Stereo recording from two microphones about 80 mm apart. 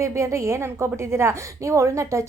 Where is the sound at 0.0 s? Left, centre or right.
Right.